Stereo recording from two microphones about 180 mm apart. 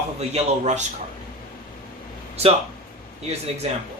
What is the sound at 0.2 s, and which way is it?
Speech, 35° right (ahead or behind).